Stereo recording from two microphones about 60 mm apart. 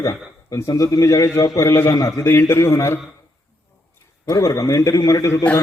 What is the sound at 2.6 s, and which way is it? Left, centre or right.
Speech, left.